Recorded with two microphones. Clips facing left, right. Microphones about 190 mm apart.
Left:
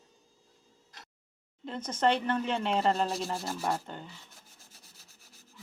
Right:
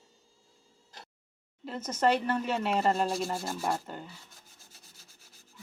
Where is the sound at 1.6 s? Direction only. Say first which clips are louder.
Right 1 dB; 5° right (ahead or behind).